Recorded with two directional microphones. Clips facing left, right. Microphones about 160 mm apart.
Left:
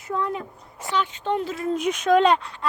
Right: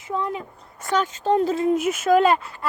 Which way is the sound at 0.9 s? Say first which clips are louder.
Right 4 dB; 45° right (ahead or behind).